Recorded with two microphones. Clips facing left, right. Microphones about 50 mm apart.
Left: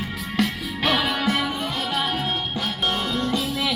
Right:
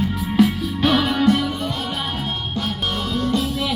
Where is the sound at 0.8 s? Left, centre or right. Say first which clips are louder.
Right 4 dB; centre.